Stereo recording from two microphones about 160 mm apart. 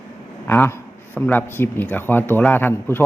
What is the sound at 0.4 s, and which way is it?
A man's voice, 15° left (ahead or behind).